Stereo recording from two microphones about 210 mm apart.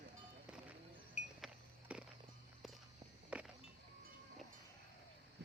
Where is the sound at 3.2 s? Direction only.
5° right (ahead or behind).